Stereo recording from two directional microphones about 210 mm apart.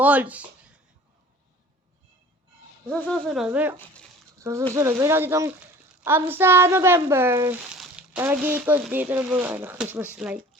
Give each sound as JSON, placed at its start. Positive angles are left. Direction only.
{"t": 0.0, "sound": "speech", "side_deg": -5}
{"t": 2.9, "sound": "speech", "side_deg": 0}
{"t": 4.4, "sound": "a sound", "side_deg": -15}
{"t": 4.7, "sound": "speech", "side_deg": -15}